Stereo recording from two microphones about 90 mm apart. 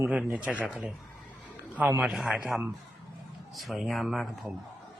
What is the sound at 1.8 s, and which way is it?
Speech, 15° right (ahead or behind).